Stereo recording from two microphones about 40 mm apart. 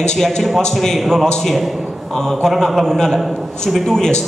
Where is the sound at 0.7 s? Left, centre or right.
Centre.